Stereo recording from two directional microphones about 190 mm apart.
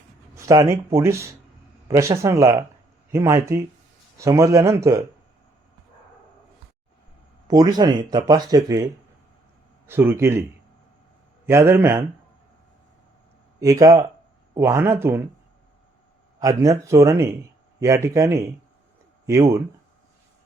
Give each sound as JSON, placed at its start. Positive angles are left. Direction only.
{"t": 0.3, "sound": "speech", "side_deg": -15}
{"t": 7.4, "sound": "speech", "side_deg": -20}
{"t": 11.4, "sound": "speech", "side_deg": -15}
{"t": 13.6, "sound": "speech", "side_deg": -20}
{"t": 16.4, "sound": "speech", "side_deg": -15}